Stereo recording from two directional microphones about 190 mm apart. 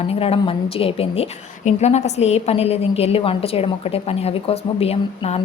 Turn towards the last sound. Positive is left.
turn(degrees=30)  # may be behind; listen again after turning